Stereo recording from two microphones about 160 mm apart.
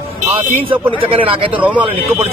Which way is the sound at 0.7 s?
35° right (ahead or behind).